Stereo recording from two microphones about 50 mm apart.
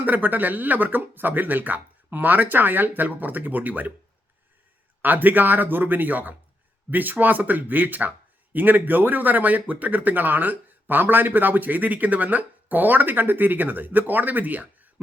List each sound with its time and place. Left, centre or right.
0.0 s speech: right
5.0 s speech: right